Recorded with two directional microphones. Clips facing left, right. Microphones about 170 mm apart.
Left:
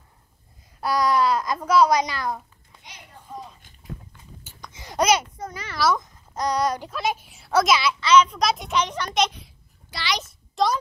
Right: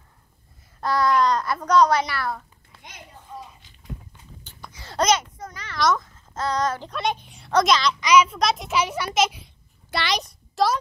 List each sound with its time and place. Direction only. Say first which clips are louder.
0.7 s a child's voice: right 1 dB; 10° left (ahead or behind)
3.3 s a sound: left 2 dB; 10° left (ahead or behind)
4.7 s babbling: left 1 dB; 15° left (ahead or behind)
5.5 s a child's voice: even; 10° left (ahead or behind)
8.0 s a child's voice: left 1 dB; 10° right (ahead or behind)
9.8 s a child's voice: right 3 dB; 55° right (ahead or behind)
10.5 s a sound: right 1 dB; centre (ahead or behind)